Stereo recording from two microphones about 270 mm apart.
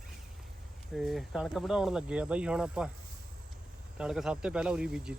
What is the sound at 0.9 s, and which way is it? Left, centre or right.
Speech, centre.